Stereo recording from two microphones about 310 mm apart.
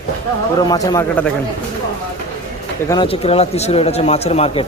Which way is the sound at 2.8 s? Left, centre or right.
Centre.